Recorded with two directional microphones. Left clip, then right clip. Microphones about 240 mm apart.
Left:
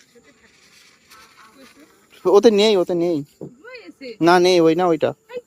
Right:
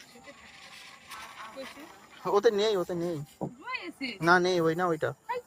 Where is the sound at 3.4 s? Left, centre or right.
Left.